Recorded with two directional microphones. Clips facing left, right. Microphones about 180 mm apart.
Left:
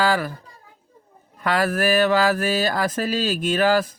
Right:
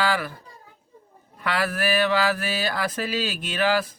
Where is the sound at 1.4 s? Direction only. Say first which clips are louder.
Left 4 dB; 45° left (ahead or behind).